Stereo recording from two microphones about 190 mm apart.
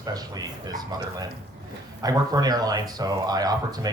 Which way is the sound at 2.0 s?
20° right (ahead or behind).